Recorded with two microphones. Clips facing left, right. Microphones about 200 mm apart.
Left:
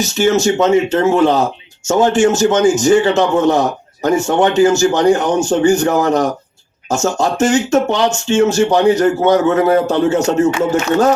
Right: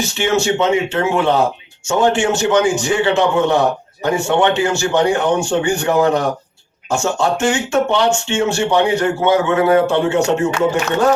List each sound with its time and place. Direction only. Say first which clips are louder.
0.0 s speech: left 4 dB; 40° left (ahead or behind)